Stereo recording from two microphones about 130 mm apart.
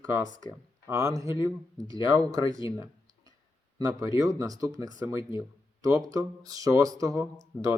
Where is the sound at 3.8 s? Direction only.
30° right (ahead or behind).